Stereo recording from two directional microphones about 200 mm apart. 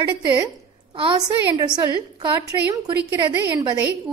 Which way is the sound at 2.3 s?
15° right (ahead or behind).